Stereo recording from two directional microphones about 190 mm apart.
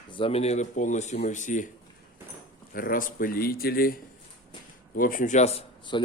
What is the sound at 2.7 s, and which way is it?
Speech, 45° left (ahead or behind).